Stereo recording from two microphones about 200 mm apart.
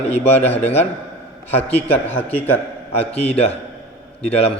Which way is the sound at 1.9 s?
10° left (ahead or behind).